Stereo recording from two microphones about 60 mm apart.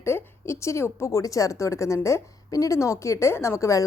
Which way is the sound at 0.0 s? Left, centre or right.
Left.